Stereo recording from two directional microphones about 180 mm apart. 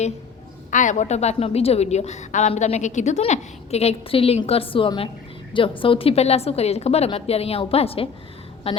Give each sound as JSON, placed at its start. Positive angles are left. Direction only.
{"t": 0.7, "sound": "a woman's voice", "side_deg": 45}